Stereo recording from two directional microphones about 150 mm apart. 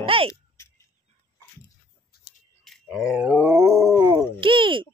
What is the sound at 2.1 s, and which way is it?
Scissors, 90° left.